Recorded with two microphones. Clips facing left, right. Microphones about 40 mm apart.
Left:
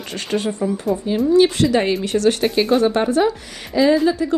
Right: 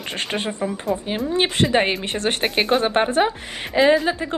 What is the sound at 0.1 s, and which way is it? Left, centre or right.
Speech, right.